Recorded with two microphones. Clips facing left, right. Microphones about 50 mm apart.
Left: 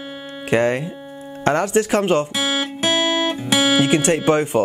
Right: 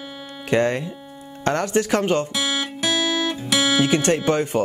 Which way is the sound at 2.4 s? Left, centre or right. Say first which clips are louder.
Left 3 dB; left.